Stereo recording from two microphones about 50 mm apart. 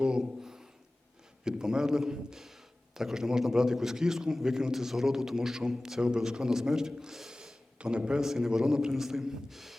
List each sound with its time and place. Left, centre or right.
0.0 s a sound: centre
1.5 s a man's voice: centre
7.8 s a man's voice: right; by 9.7 s centre